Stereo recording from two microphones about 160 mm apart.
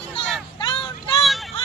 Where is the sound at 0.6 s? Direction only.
30° left (ahead or behind).